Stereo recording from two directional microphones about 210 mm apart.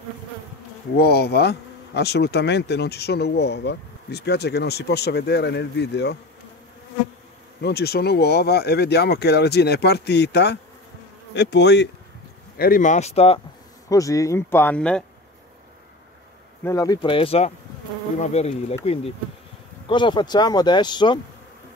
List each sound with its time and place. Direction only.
0.9 s speech: 50° left (ahead or behind)
7.6 s speech: 50° left (ahead or behind)
11.3 s bee: 55° left (ahead or behind)
12.5 s speech: 45° left (ahead or behind)
13.8 s speech: 15° left (ahead or behind)
16.6 s speech: 15° left (ahead or behind)